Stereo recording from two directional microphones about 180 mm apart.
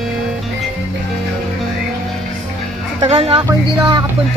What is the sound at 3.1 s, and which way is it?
Speech, 30° right (ahead or behind).